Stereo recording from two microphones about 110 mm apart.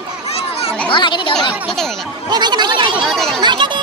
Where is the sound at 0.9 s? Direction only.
45° left (ahead or behind).